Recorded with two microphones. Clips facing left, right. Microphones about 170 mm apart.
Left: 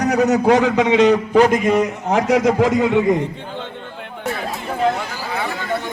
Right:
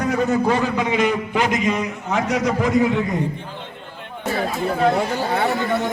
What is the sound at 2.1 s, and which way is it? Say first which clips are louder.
Speech: left 4 dB; 80° left.